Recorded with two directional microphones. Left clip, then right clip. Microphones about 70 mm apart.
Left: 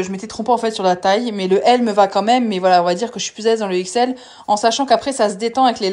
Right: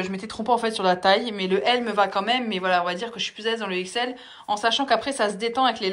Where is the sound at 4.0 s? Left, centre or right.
Left.